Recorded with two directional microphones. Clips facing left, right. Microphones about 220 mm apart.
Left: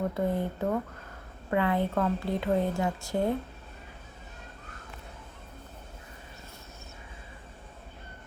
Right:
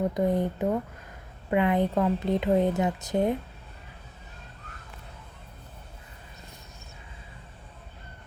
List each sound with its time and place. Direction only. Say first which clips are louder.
0.1 s a woman's voice: right 4 dB; 15° right (ahead or behind)